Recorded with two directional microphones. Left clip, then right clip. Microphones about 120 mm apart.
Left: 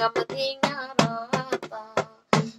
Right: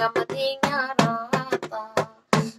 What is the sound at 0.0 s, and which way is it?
Music, 35° right (ahead or behind).